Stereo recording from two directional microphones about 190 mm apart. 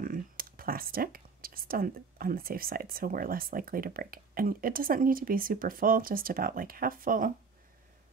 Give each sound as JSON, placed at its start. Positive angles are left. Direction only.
{"t": 0.0, "sound": "speech", "side_deg": -50}